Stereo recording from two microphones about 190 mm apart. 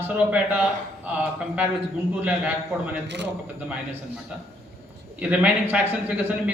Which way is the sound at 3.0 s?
65° right (ahead or behind).